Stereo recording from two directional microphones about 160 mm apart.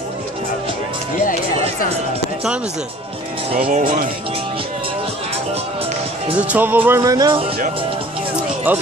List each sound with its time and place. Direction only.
3.7 s speech: 55° right (ahead or behind)
6.3 s speech: 10° right (ahead or behind)
7.0 s speech: 25° right (ahead or behind)
8.7 s speech: 10° right (ahead or behind)